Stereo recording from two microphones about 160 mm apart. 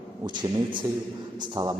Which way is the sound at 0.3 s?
30° right (ahead or behind).